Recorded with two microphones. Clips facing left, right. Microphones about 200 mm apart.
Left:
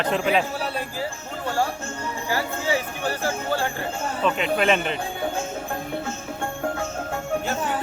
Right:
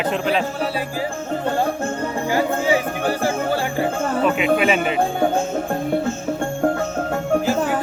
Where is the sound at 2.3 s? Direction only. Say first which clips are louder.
Right 7 dB; 15° right (ahead or behind).